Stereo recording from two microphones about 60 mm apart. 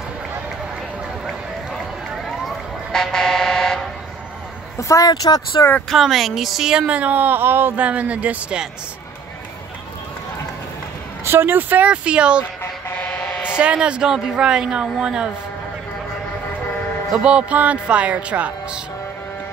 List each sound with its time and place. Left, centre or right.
2.2 s vehicle: centre
4.7 s speech: left
5.9 s a woman's voice: centre
6.9 s speech: right
7.8 s speech: right
11.2 s speech: right
11.8 s speech: centre
12.9 s vehicle: centre
13.6 s speech: centre
17.2 s speech: centre